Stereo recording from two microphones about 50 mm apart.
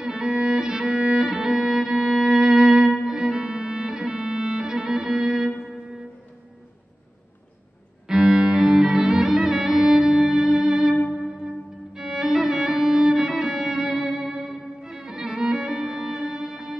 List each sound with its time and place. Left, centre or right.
0.0 s violin: centre
2.2 s music: centre
8.1 s music: centre